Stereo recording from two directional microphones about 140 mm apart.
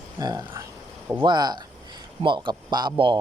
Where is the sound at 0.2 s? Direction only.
25° right (ahead or behind).